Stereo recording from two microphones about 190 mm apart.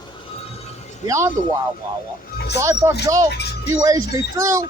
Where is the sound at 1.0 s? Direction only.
15° right (ahead or behind).